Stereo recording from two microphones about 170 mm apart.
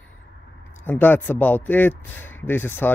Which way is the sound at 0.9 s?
10° left (ahead or behind).